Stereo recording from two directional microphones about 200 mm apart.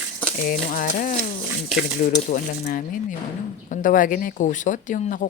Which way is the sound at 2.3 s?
40° left (ahead or behind).